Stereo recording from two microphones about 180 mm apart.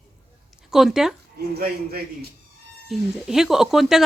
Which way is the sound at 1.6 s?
60° right (ahead or behind).